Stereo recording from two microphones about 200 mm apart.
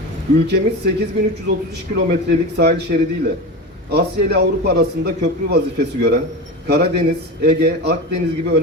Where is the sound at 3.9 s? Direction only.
55° right (ahead or behind).